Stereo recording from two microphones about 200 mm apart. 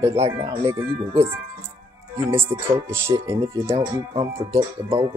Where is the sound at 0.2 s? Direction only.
25° right (ahead or behind).